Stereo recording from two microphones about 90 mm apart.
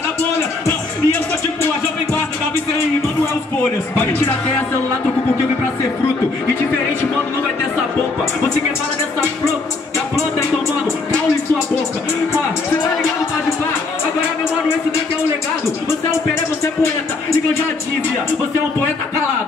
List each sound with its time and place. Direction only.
0.7 s music: 25° left (ahead or behind)
3.9 s speech: 25° left (ahead or behind)